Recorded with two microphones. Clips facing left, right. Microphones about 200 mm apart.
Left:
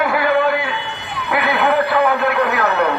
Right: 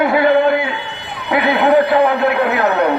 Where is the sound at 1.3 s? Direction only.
20° right (ahead or behind).